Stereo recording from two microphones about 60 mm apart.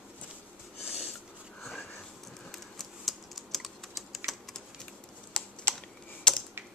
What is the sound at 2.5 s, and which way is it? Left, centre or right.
Typing, centre.